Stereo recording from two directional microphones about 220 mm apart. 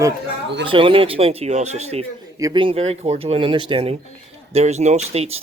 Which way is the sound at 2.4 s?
20° right (ahead or behind).